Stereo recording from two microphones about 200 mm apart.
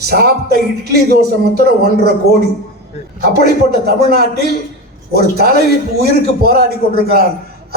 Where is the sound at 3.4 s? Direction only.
50° right (ahead or behind).